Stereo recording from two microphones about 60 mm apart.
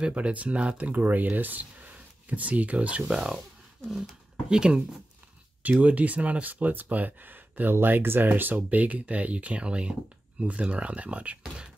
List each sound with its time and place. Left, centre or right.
0.0 s speech: right
4.5 s speech: centre